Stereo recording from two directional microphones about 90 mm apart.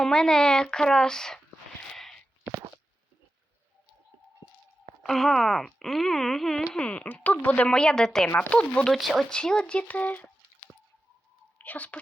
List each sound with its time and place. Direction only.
0.0 s speech: 5° left (ahead or behind)
5.0 s speech: 5° left (ahead or behind)
6.7 s speech: 15° left (ahead or behind)
8.9 s speech: centre (ahead or behind); by 10.2 s 20° left (ahead or behind)
11.5 s speech: 20° left (ahead or behind)